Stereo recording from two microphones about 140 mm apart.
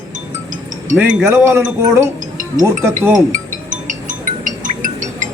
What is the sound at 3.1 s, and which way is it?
Music, 70° right (ahead or behind).